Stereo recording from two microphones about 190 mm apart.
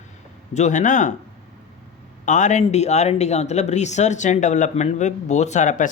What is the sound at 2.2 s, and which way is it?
Speech, 40° left (ahead or behind).